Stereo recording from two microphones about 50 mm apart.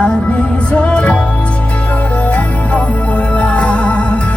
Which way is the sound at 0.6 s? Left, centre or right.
Left.